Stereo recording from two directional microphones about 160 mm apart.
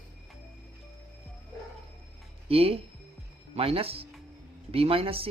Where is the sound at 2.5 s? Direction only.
35° right (ahead or behind).